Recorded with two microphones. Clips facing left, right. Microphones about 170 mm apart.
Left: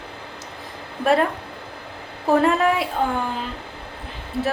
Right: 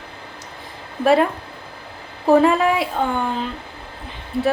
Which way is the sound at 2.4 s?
Centre (ahead or behind).